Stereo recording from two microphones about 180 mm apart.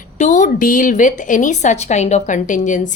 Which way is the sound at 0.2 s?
45° left (ahead or behind).